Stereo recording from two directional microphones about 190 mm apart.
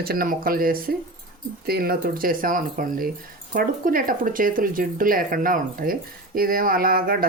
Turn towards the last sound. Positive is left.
turn(degrees=-50)  # may be behind; listen again after turning